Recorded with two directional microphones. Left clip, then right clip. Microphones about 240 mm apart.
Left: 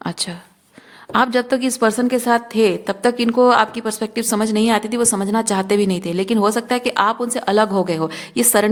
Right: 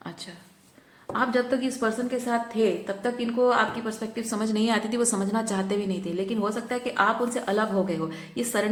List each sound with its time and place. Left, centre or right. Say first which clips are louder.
1.1 s a woman's voice: left 8 dB; left